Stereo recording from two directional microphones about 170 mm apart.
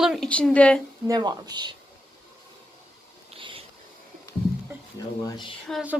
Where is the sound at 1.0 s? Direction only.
25° right (ahead or behind).